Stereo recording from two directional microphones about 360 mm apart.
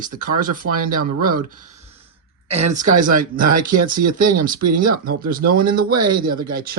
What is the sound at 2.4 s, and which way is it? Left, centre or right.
Speech, centre.